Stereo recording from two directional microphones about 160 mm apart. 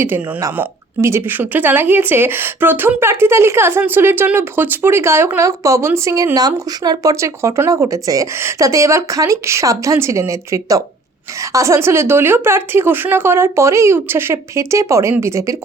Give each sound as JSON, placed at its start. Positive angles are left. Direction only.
{"t": 0.0, "sound": "speech", "side_deg": -15}